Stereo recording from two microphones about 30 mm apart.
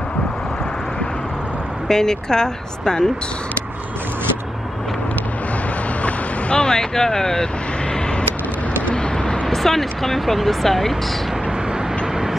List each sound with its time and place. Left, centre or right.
1.9 s speech: centre
6.5 s speech: left
8.9 s vehicle: left
9.5 s speech: centre